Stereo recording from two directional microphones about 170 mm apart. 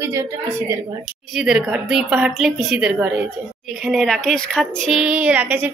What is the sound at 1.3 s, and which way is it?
Speech, 5° right (ahead or behind).